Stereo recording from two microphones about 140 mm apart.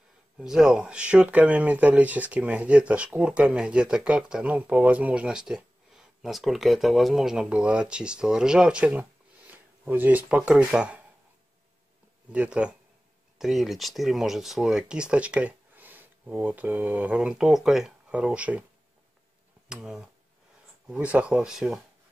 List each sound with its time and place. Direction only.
0.4 s speech: 5° right (ahead or behind)
12.3 s speech: 10° right (ahead or behind)
19.7 s speech: 5° right (ahead or behind)